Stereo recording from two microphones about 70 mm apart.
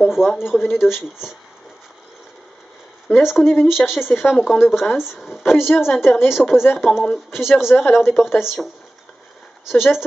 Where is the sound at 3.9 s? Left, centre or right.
Centre.